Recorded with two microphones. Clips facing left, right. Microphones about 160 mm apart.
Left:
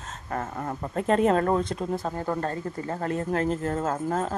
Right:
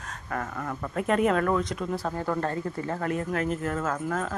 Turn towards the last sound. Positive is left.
turn(degrees=30)  # may be behind; listen again after turning